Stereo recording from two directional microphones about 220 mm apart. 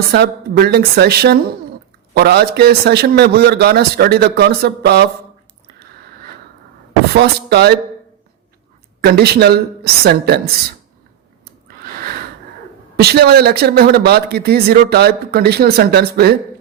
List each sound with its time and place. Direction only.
0.1 s a man's voice: 45° right (ahead or behind)
7.1 s a man's voice: 50° right (ahead or behind)
9.0 s a man's voice: 45° right (ahead or behind)
11.8 s a sound: 45° right (ahead or behind)
13.0 s a man's voice: 45° right (ahead or behind)